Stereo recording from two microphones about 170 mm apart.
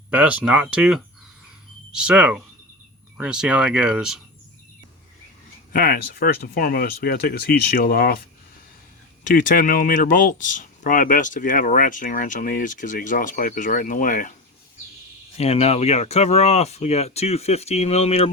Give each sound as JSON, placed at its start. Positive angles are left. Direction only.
{"t": 0.1, "sound": "speech", "side_deg": -10}
{"t": 5.7, "sound": "speech", "side_deg": 60}
{"t": 9.2, "sound": "speech", "side_deg": 50}
{"t": 15.4, "sound": "speech", "side_deg": 40}